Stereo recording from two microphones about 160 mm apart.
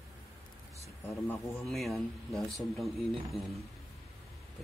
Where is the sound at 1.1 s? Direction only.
15° left (ahead or behind).